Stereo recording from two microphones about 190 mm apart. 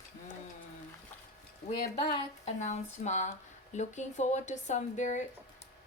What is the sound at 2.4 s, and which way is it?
Speech, 35° left (ahead or behind).